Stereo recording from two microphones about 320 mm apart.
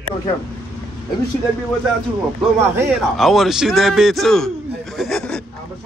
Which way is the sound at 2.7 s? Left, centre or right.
Centre.